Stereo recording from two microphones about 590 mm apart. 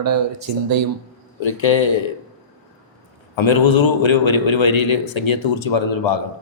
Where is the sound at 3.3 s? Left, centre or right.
Left.